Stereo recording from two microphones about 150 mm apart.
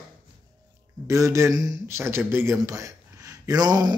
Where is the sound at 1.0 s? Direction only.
20° right (ahead or behind).